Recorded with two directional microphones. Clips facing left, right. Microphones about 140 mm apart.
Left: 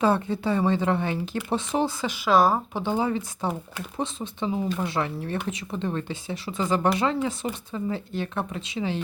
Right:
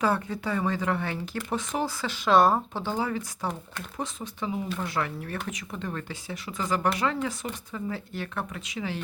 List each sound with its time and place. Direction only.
0.0 s speech: 25° left (ahead or behind)
2.0 s speech: 5° left (ahead or behind)
2.7 s speech: 15° left (ahead or behind)